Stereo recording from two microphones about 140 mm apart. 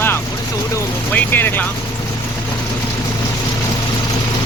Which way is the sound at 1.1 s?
15° left (ahead or behind).